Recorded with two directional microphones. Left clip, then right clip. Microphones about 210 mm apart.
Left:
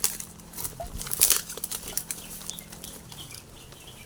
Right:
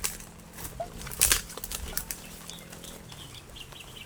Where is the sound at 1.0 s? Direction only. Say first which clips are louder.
Left 1 dB; 35° left (ahead or behind).